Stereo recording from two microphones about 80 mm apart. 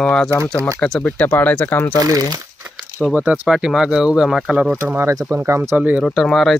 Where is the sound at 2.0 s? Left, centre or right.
Right.